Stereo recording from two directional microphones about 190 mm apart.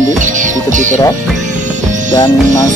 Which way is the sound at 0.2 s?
40° right (ahead or behind).